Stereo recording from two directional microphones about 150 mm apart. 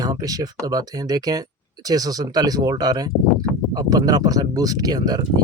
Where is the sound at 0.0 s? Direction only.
25° right (ahead or behind).